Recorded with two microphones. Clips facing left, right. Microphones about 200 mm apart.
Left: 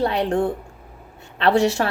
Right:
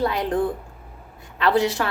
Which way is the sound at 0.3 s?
30° left (ahead or behind).